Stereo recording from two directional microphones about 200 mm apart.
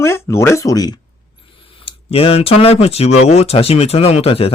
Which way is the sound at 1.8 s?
30° left (ahead or behind).